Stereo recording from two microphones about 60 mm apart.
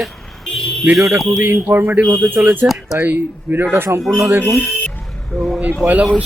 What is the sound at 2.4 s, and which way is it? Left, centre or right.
Speech, right.